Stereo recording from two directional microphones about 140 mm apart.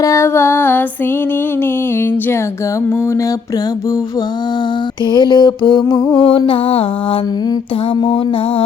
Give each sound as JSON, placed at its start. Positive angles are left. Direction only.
{"t": 0.0, "sound": "music", "side_deg": 20}
{"t": 5.1, "sound": "music", "side_deg": 30}
{"t": 8.0, "sound": "music", "side_deg": 40}